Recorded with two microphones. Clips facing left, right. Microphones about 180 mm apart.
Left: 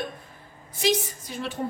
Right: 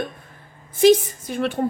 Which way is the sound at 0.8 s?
55° right (ahead or behind).